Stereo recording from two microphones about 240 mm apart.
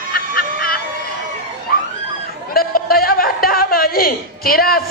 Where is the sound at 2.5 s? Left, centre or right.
Left.